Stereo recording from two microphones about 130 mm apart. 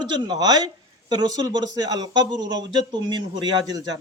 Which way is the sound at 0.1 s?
35° right (ahead or behind).